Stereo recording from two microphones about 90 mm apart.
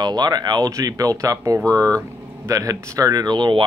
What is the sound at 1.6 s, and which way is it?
Speech, 15° left (ahead or behind).